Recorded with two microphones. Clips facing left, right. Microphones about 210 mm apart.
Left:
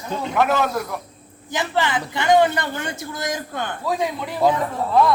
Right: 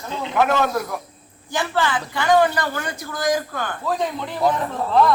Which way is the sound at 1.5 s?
20° left (ahead or behind).